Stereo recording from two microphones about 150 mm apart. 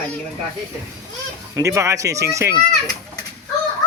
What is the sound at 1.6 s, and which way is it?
Speech, 20° right (ahead or behind).